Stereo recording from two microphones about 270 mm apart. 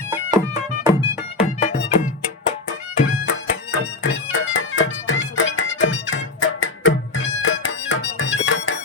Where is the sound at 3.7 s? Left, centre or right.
Left.